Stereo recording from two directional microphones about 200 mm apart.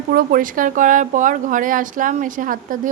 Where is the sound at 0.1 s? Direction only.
45° right (ahead or behind).